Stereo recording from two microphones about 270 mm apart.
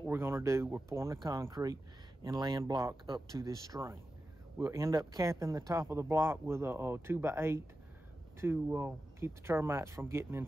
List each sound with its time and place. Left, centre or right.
0.0 s speech: centre